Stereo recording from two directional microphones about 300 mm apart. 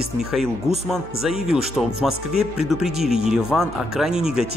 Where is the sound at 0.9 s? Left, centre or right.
Centre.